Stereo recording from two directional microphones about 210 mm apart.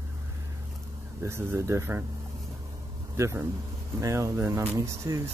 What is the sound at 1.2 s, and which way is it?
Speech, 10° right (ahead or behind).